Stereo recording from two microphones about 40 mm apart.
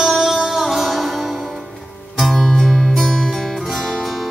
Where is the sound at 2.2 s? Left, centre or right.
Centre.